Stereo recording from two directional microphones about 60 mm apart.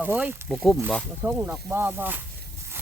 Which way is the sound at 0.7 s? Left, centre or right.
Centre.